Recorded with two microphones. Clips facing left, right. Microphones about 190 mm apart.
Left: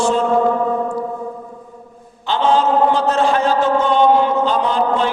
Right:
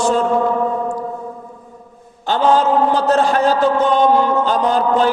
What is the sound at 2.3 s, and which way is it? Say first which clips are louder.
Chant: right 1 dB; 45° right (ahead or behind).